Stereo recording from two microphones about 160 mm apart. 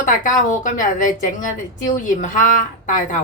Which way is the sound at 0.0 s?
55° left (ahead or behind).